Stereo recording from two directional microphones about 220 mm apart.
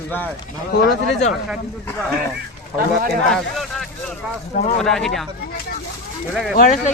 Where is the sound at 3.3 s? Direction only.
Centre (ahead or behind).